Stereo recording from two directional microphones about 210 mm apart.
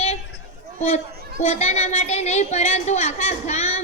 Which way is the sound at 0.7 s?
30° left (ahead or behind).